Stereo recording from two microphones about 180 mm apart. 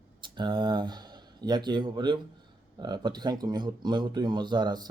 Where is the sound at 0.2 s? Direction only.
25° right (ahead or behind).